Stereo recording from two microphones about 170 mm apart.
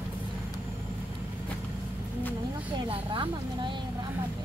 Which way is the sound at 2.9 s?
30° right (ahead or behind).